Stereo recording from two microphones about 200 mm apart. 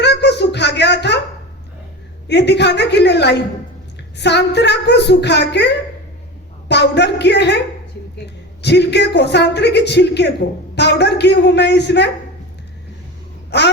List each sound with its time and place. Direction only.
0.0 s a sound: 55° left (ahead or behind)
2.2 s a woman's voice: 60° left (ahead or behind)
8.6 s a woman's voice: 60° left (ahead or behind)
13.5 s a woman's voice: 60° left (ahead or behind)